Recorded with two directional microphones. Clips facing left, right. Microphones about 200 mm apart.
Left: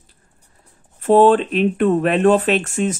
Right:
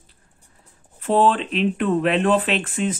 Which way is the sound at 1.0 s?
45° left (ahead or behind).